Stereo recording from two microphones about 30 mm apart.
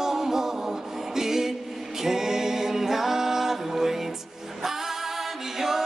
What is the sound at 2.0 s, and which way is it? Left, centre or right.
A capella, centre.